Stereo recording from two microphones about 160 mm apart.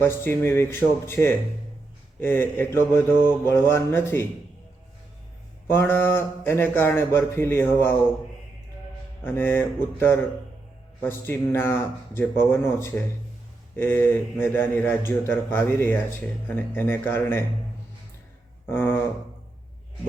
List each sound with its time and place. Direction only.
0.0 s a man's voice: 15° left (ahead or behind)
5.6 s a man's voice: 15° left (ahead or behind)
9.2 s a man's voice: 15° left (ahead or behind)
11.3 s a man's voice: 15° left (ahead or behind)
18.7 s a man's voice: 15° left (ahead or behind)